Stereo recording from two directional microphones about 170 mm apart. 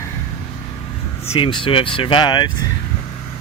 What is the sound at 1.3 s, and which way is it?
Speech, 30° left (ahead or behind).